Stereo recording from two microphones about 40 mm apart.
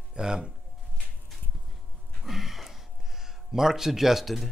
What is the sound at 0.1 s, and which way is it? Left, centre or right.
Speech, centre.